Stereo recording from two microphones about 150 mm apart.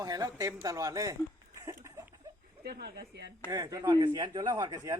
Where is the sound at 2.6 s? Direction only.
90° right.